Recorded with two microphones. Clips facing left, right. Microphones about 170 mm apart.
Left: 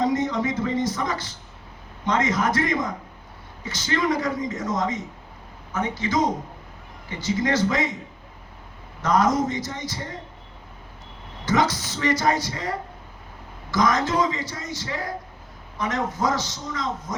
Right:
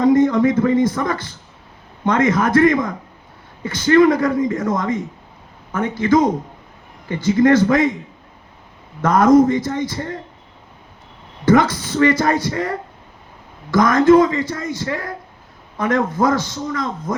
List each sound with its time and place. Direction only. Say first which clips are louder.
0.0 s a man's voice: right 9 dB; 55° right (ahead or behind)
9.0 s a man's voice: right 9 dB; 55° right (ahead or behind)
11.4 s a man's voice: right 8 dB; 55° right (ahead or behind)